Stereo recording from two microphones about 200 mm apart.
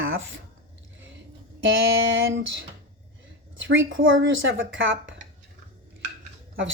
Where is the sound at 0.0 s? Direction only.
80° right.